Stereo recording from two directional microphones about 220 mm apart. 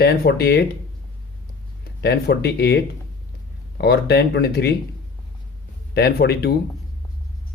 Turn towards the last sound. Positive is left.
turn(degrees=45)  # may be behind; listen again after turning